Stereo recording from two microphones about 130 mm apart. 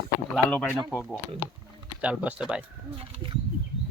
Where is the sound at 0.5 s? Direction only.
15° left (ahead or behind).